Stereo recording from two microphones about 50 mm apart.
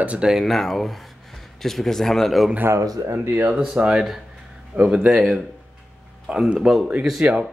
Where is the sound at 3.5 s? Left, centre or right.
Right.